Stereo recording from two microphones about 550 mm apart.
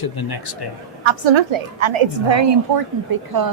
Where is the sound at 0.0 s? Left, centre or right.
Left.